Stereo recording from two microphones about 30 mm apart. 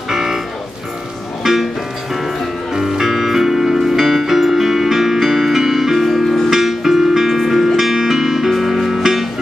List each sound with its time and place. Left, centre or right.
0.1 s music: centre
1.4 s music: centre
2.7 s music: centre
3.1 s music: centre
7.2 s music: centre